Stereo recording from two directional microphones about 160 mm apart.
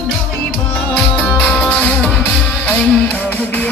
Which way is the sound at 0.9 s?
10° left (ahead or behind).